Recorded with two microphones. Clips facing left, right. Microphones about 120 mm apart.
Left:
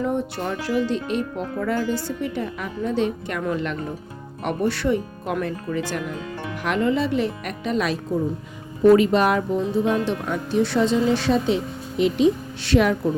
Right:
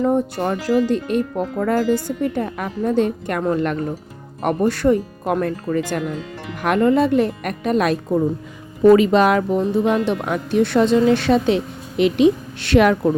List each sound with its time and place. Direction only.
0.0 s speech: 40° right (ahead or behind)
8.9 s speech: 90° right
9.8 s speech: 75° right (ahead or behind)